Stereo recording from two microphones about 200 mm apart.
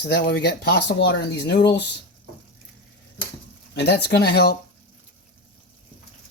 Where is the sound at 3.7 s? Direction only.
55° left (ahead or behind).